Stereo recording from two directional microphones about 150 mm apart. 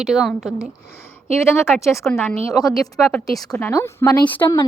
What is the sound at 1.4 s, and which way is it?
A woman's voice, 15° left (ahead or behind).